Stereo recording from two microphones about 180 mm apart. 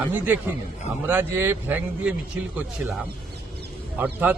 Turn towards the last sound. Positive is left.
turn(degrees=-10)  # may be behind; listen again after turning